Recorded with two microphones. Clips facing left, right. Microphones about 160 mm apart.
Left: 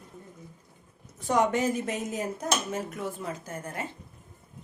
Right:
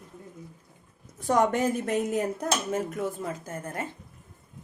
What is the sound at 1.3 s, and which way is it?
Speech, 50° right (ahead or behind).